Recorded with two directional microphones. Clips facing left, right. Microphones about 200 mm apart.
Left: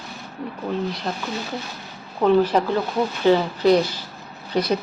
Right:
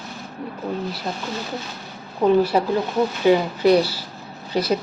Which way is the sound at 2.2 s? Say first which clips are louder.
Even; 10° right (ahead or behind).